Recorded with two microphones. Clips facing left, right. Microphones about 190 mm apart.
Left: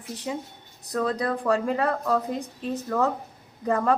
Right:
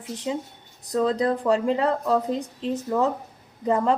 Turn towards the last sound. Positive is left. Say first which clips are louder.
# right 1 dB
turn(degrees=-20)  # may be behind; listen again after turning